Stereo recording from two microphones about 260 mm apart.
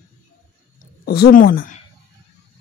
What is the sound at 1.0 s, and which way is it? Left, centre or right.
Speech, left.